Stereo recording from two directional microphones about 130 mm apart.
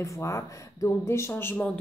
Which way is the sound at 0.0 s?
25° left (ahead or behind).